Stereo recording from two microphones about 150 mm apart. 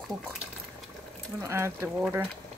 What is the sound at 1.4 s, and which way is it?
Speech, 15° right (ahead or behind).